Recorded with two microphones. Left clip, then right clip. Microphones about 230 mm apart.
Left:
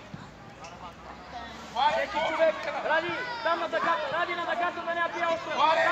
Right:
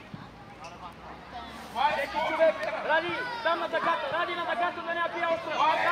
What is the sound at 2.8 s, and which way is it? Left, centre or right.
Speech, right.